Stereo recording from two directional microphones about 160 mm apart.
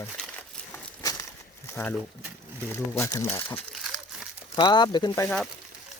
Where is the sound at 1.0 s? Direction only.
20° left (ahead or behind).